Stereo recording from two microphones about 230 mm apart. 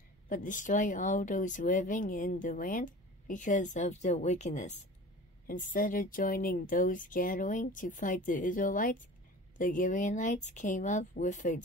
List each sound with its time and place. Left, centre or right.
0.3 s speech: left